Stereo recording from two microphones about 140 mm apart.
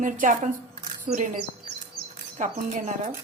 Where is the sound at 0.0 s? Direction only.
65° right (ahead or behind).